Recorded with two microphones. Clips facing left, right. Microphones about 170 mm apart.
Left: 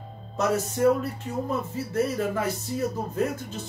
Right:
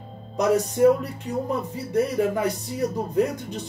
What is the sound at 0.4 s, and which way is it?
Speech, 15° right (ahead or behind).